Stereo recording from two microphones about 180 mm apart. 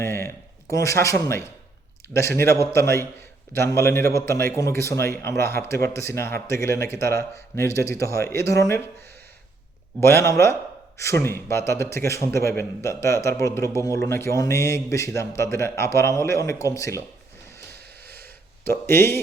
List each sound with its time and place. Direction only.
0.0 s a man's voice: 15° left (ahead or behind)
10.0 s a man's voice: 15° left (ahead or behind)
18.0 s a sound: 60° right (ahead or behind)
18.6 s a man's voice: 10° left (ahead or behind)